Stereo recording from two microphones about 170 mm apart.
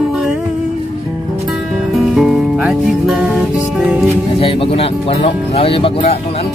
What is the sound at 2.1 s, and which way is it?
Music, centre (ahead or behind).